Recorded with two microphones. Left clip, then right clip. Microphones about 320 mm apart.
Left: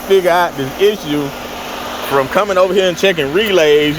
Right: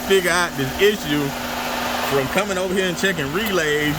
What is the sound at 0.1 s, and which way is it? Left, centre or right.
Speech, centre.